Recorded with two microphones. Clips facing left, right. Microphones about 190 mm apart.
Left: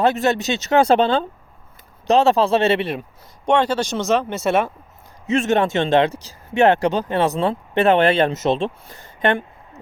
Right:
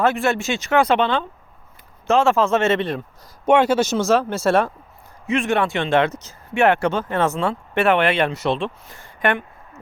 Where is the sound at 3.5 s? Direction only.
10° right (ahead or behind).